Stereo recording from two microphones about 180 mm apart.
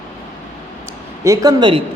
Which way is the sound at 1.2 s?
20° right (ahead or behind).